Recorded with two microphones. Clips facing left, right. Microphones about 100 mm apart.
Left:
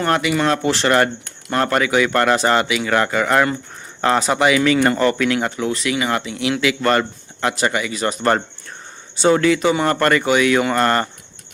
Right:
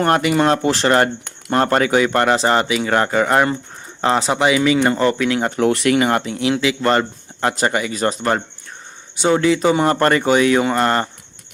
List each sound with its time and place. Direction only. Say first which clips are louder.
0.0 s speech: right 3 dB; 40° right (ahead or behind)
2.0 s speech: even; 20° right (ahead or behind)
5.5 s speech: right 6 dB; 60° right (ahead or behind); by 7.0 s 25° right (ahead or behind)
7.4 s speech: right 1 dB; 35° right (ahead or behind)
9.1 s speech: left 1 dB; 15° right (ahead or behind)
9.6 s speech: right 2 dB; 35° right (ahead or behind); by 11.1 s 20° right (ahead or behind)